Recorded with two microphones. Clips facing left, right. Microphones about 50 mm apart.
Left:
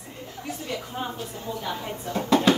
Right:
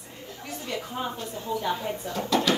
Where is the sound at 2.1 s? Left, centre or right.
Left.